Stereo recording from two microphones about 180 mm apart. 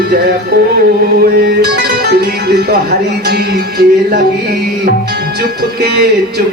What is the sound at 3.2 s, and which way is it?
Music, 60° right (ahead or behind).